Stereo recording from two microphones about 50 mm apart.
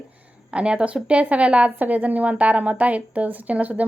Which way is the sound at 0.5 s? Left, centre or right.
Right.